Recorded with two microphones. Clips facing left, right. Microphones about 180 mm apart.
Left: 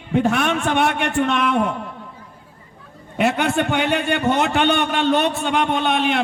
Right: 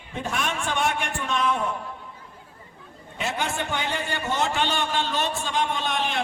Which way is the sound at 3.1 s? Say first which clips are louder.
Left 10 dB; 65° left (ahead or behind).